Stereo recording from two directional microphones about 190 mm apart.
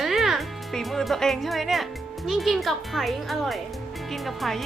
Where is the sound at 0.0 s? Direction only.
Centre (ahead or behind).